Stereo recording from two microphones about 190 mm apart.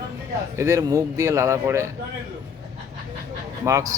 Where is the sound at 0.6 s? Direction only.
15° right (ahead or behind).